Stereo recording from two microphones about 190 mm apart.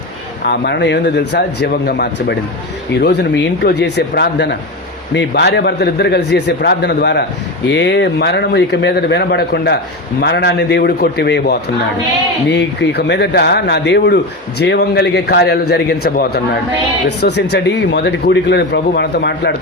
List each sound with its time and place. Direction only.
0.4 s speech: 60° left (ahead or behind)